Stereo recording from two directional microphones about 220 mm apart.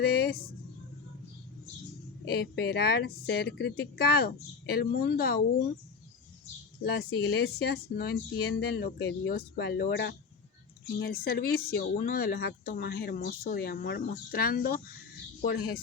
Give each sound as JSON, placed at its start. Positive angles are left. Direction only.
{"t": 0.0, "sound": "speech", "side_deg": 45}
{"t": 2.2, "sound": "speech", "side_deg": 45}
{"t": 6.8, "sound": "speech", "side_deg": 50}